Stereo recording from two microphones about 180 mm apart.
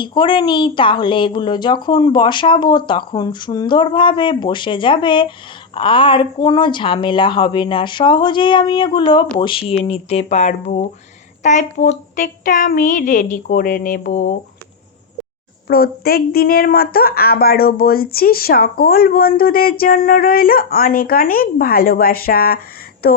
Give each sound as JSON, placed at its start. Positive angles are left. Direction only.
{"t": 0.0, "sound": "speech", "side_deg": 25}
{"t": 15.6, "sound": "speech", "side_deg": 60}